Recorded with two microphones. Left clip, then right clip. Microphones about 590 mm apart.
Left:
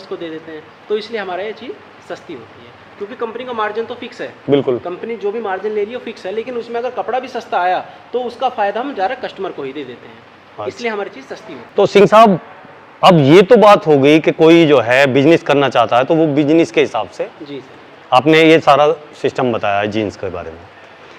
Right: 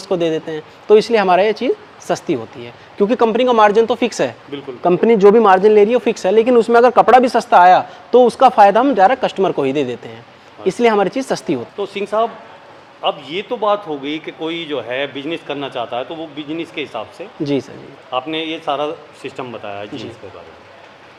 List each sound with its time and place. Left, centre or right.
0.1 s speech: right
3.1 s speech: right
11.8 s a man's voice: left